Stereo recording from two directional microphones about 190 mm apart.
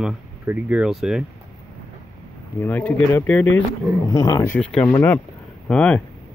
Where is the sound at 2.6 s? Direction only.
10° left (ahead or behind).